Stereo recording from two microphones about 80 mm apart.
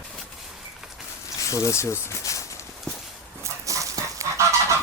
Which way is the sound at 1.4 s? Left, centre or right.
Left.